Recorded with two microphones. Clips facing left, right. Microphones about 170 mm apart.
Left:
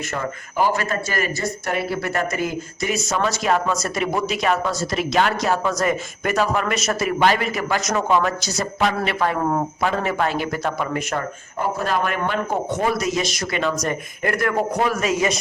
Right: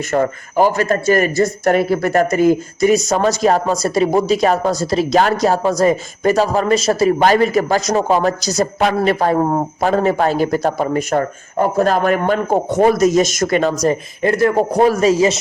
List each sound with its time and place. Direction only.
0.1 s a man's voice: 45° right (ahead or behind)
13.8 s speech: 25° right (ahead or behind)